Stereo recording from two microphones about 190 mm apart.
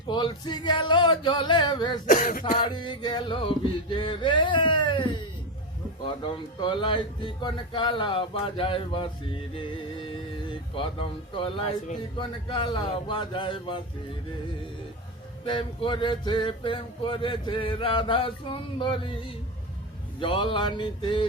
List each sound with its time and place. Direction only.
0.1 s speech: 25° left (ahead or behind)
2.0 s speech: 45° left (ahead or behind)
2.6 s speech: 25° left (ahead or behind)
15.4 s speech: 25° left (ahead or behind)
20.1 s speech: 25° left (ahead or behind)